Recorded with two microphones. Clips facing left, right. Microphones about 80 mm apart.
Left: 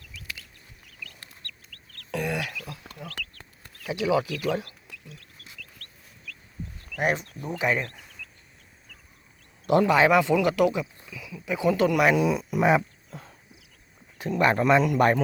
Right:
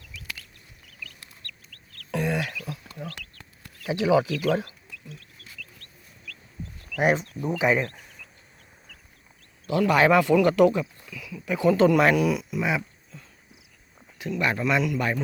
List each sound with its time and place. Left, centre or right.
1.7 s chicken: right
2.0 s a sound: centre
3.2 s chicken: left
3.8 s speech: centre
6.9 s speech: centre
7.9 s insect: right
9.8 s speech: centre
10.3 s speech: centre
11.0 s speech: centre
12.0 s speech: left
12.5 s a sound: left
14.2 s a man's voice: left